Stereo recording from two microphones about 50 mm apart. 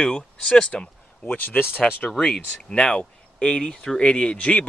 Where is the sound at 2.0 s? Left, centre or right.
Centre.